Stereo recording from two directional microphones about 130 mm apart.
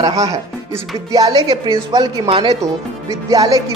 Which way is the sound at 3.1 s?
25° right (ahead or behind).